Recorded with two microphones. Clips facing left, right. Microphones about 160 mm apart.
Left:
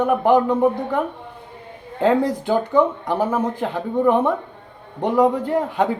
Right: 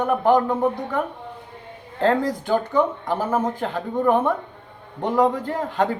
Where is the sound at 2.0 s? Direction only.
15° left (ahead or behind).